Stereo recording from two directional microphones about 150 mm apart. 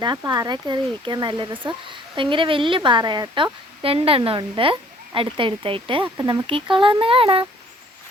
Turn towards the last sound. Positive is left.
turn(degrees=-35)  # may be behind; listen again after turning